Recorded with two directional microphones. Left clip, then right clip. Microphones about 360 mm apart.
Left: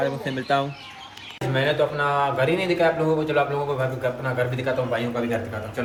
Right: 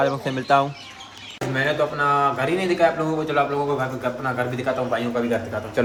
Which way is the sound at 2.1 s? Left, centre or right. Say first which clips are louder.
Right 1 dB; centre.